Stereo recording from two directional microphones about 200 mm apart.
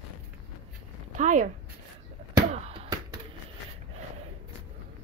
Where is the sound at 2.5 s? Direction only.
35° right (ahead or behind).